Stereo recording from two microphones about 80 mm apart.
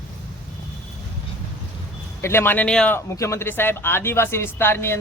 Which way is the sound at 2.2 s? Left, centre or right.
Left.